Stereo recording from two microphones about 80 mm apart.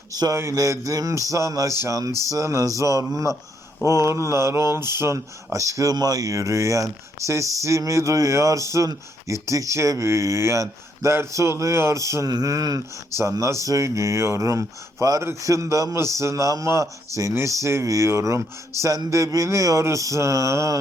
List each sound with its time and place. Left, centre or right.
0.1 s speech: right